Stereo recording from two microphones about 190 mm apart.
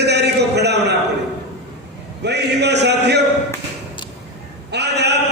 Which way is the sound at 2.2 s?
60° right (ahead or behind).